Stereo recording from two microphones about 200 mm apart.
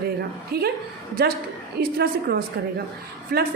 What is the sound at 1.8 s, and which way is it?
A woman's voice, 50° right (ahead or behind).